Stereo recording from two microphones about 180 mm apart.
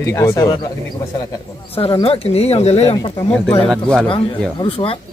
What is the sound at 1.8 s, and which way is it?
Speech, 30° left (ahead or behind).